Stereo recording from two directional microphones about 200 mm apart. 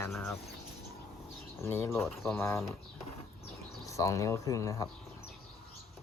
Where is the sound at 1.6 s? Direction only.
10° left (ahead or behind).